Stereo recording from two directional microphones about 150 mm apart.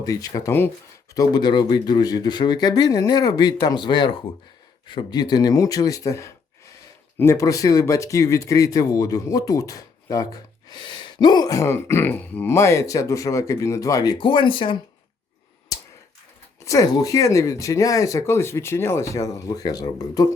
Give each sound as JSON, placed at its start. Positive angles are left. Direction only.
{"t": 0.0, "sound": "speech", "side_deg": 25}
{"t": 16.6, "sound": "speech", "side_deg": 20}